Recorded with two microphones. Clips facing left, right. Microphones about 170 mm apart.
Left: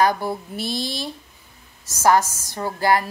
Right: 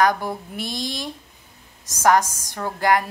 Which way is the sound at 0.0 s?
10° left (ahead or behind).